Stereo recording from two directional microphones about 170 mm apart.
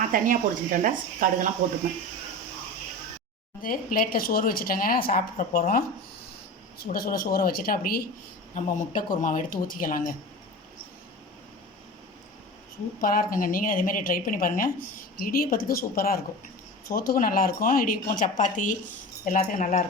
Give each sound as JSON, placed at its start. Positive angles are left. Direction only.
{"t": 0.1, "sound": "speech", "side_deg": -50}
{"t": 3.6, "sound": "speech", "side_deg": 55}
{"t": 8.5, "sound": "speech", "side_deg": 45}
{"t": 13.0, "sound": "speech", "side_deg": 55}